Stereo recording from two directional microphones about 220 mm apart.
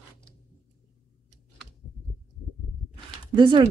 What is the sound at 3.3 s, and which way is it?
Speech, 20° right (ahead or behind).